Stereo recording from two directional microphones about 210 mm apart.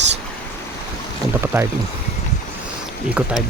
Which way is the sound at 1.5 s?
15° right (ahead or behind).